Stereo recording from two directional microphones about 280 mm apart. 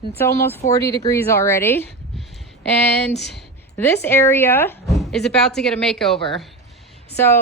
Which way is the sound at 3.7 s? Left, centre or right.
Centre.